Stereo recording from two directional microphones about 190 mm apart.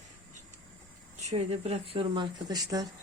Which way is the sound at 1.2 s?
35° right (ahead or behind).